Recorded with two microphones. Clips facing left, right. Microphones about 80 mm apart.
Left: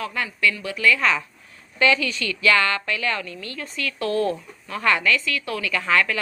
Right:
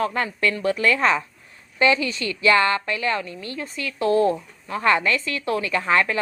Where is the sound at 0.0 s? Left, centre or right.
Right.